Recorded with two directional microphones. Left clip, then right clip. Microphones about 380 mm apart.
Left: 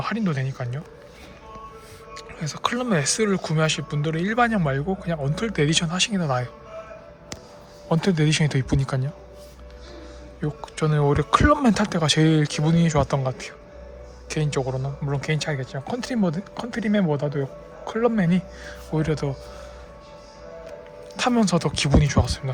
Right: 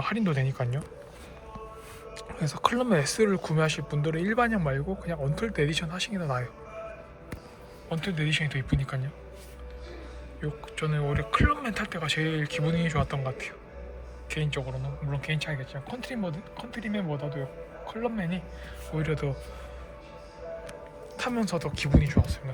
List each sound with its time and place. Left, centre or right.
0.0 s speech: centre
2.1 s speech: centre
7.9 s speech: centre
10.4 s speech: centre
21.2 s speech: centre